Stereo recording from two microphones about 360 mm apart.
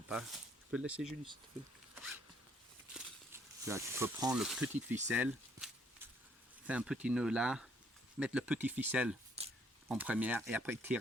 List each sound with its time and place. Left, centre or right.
0.1 s speech: centre
2.0 s zipper: centre
2.9 s speech: centre
9.4 s a sound: centre
9.9 s speech: centre